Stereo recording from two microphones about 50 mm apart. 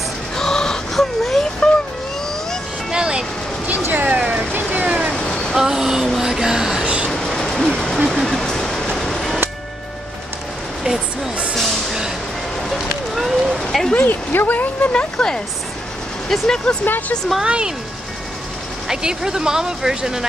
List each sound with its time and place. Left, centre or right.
0.4 s a sound: centre
1.6 s vehicle: centre
2.9 s vehicle: centre
3.9 s vehicle: right
5.1 s cat: centre
5.6 s speech: centre
6.1 s a sound: centre
7.1 s train: centre
12.7 s a sound: centre
13.9 s speech: left
14.9 s speech: centre
17.4 s speech: centre
18.9 s speech: centre